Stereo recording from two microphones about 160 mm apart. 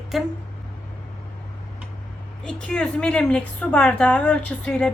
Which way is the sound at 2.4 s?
5° left (ahead or behind).